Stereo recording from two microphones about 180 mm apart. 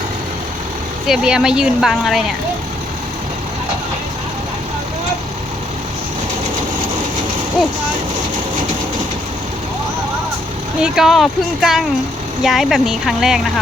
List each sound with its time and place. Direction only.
1.0 s speech: 5° right (ahead or behind)
10.8 s speech: 5° right (ahead or behind)